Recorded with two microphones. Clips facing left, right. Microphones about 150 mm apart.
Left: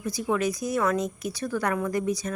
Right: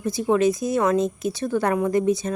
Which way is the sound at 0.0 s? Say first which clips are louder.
Right 7 dB; 25° right (ahead or behind).